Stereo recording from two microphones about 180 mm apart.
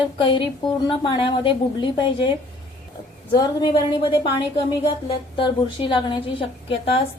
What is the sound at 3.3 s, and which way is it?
A woman's voice, 25° left (ahead or behind).